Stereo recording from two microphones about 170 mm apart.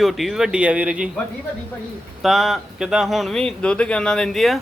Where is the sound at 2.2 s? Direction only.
Centre (ahead or behind).